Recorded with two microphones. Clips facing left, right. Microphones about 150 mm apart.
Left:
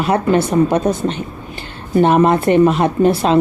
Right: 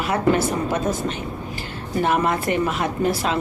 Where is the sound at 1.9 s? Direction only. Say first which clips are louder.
Left 9 dB; 30° left (ahead or behind).